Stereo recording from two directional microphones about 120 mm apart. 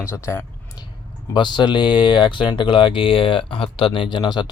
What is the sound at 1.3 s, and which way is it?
Speech, 40° left (ahead or behind).